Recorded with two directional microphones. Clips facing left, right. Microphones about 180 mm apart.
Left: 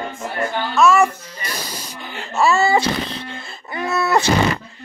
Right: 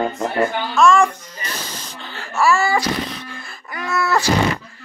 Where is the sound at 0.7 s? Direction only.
5° left (ahead or behind); by 4.3 s 20° left (ahead or behind).